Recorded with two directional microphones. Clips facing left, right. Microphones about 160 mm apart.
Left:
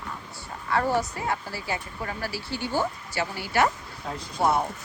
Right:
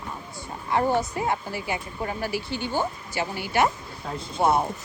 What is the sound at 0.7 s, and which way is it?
A woman's voice, 25° right (ahead or behind).